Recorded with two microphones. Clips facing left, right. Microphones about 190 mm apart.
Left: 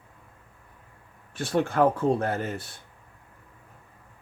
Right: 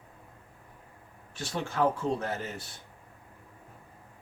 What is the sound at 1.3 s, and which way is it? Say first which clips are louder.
Speech: left 9 dB; 55° left (ahead or behind).